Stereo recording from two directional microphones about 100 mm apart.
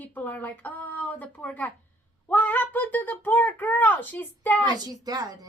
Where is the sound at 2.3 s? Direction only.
20° left (ahead or behind).